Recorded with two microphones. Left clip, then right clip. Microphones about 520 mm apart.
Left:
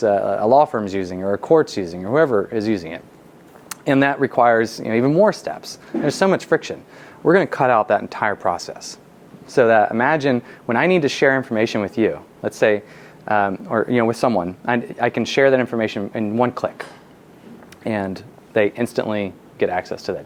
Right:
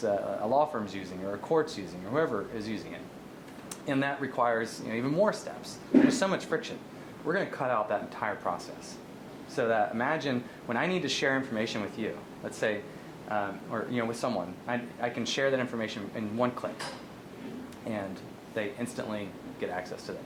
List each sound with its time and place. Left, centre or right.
0.0 s speech: left
13.2 s speech: left
17.8 s speech: left